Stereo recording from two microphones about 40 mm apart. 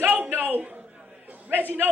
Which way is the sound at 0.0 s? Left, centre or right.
Right.